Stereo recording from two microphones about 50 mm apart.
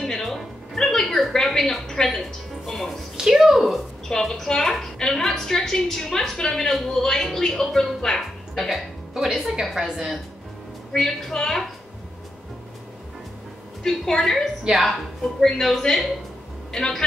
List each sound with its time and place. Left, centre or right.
0.0 s a sound: centre
3.2 s speech: centre
4.1 s a woman's voice: centre
10.9 s a woman's voice: centre
13.8 s a woman's voice: centre